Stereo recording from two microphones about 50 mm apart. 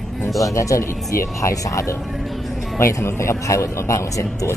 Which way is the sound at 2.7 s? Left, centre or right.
Left.